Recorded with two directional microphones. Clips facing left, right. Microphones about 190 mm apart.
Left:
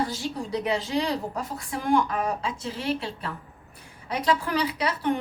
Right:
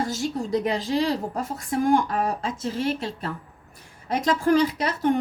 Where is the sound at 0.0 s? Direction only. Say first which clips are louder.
Right 3 dB; 45° right (ahead or behind).